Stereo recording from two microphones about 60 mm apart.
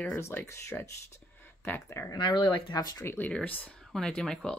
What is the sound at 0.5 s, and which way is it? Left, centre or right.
Speech, left.